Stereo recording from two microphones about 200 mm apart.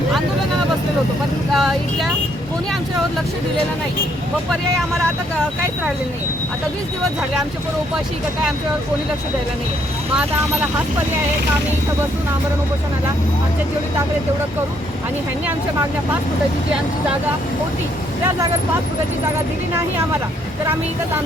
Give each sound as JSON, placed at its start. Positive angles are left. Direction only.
{"t": 1.5, "sound": "speech", "side_deg": 0}